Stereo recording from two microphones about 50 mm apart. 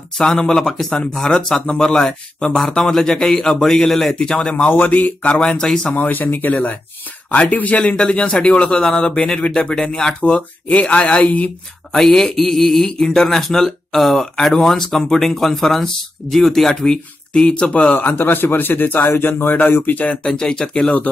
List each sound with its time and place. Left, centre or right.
0.2 s speech: centre
4.6 s speech: left
5.3 s speech: centre
5.9 s speech: left
7.8 s speech: centre
8.1 s speech: left
10.7 s speech: left
11.9 s speech: centre
17.9 s a man's voice: left
19.9 s speech: left
20.2 s speech: centre